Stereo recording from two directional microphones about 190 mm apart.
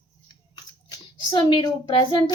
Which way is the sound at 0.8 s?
25° left (ahead or behind).